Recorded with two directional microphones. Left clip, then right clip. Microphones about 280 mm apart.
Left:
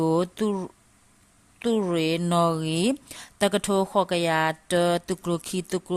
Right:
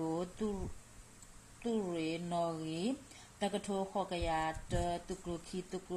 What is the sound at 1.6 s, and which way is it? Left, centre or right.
Speech, left.